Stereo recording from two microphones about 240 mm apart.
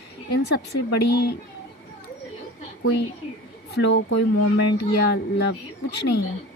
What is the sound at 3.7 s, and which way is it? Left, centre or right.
Speech, left.